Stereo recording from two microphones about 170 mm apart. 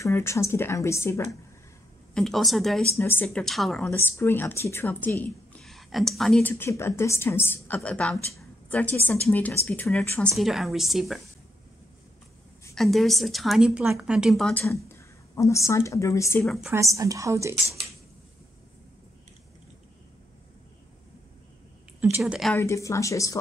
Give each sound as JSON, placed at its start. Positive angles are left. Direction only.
{"t": 0.0, "sound": "a woman's voice", "side_deg": 15}
{"t": 2.1, "sound": "a woman's voice", "side_deg": 0}
{"t": 3.0, "sound": "a woman's voice", "side_deg": 10}
{"t": 3.9, "sound": "a woman's voice", "side_deg": 15}
{"t": 6.5, "sound": "a woman's voice", "side_deg": 15}
{"t": 12.7, "sound": "a woman's voice", "side_deg": 0}
{"t": 14.6, "sound": "a woman's voice", "side_deg": 15}
{"t": 16.4, "sound": "a woman's voice", "side_deg": 0}
{"t": 16.7, "sound": "a woman's voice", "side_deg": -20}
{"t": 22.1, "sound": "a woman's voice", "side_deg": -5}
{"t": 22.6, "sound": "a woman's voice", "side_deg": 15}